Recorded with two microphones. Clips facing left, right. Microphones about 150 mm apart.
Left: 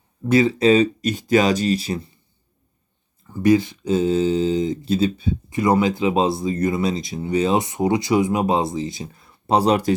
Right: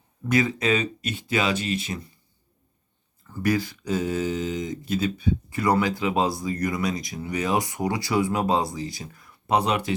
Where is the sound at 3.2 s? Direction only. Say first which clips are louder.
Left 8 dB; 20° left (ahead or behind).